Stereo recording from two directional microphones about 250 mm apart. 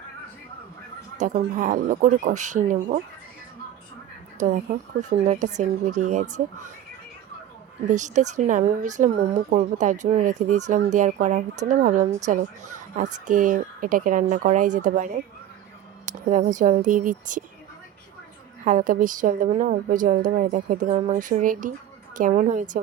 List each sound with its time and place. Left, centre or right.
1.2 s speech: right
4.4 s speech: right
7.9 s a woman's voice: right
18.6 s a woman's voice: right